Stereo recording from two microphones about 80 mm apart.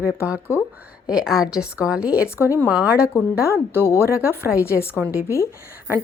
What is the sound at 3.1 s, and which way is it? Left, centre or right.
Speech, left.